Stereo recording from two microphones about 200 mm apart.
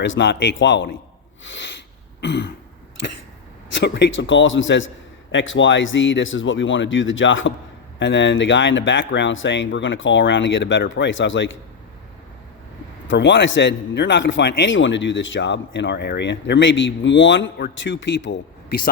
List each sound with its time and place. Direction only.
0.0 s a man's voice: 65° left (ahead or behind)
3.8 s speech: 60° left (ahead or behind)
13.1 s a man's voice: 65° left (ahead or behind)